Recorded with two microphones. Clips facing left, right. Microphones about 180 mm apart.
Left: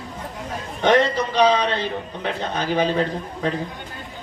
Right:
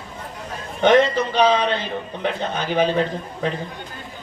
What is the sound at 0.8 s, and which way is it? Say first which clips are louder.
A man's voice: right 2 dB; 35° left (ahead or behind).